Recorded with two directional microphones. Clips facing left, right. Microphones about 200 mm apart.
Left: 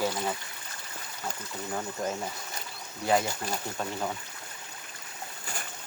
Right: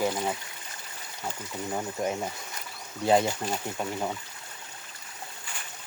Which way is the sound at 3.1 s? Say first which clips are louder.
Right 4 dB; 25° right (ahead or behind).